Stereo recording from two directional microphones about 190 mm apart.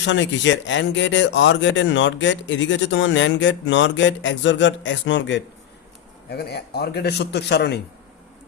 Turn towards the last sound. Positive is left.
turn(degrees=60)  # may be behind; listen again after turning